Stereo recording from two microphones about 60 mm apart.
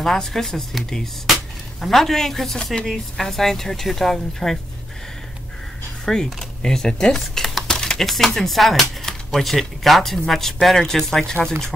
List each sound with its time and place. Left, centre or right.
0.0 s speech: centre
6.0 s speech: centre
7.6 s a sound: centre
8.4 s speech: centre